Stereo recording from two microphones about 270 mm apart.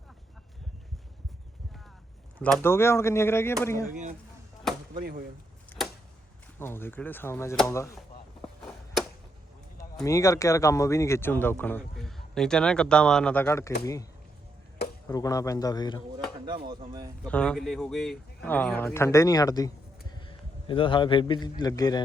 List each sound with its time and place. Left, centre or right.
2.4 s speech: centre
4.7 s a sound: centre
6.6 s speech: centre
9.7 s speech: centre
16.6 s speech: centre
17.2 s speech: centre
20.1 s a sound: centre
21.6 s speech: centre